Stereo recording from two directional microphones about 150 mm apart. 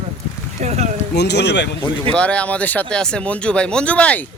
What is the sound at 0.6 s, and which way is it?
Speech, 50° right (ahead or behind).